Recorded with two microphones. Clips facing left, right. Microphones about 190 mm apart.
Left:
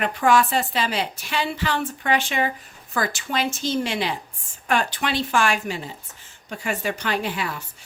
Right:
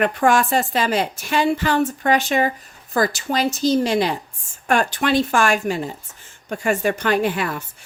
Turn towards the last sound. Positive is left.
turn(degrees=-50)  # may be behind; listen again after turning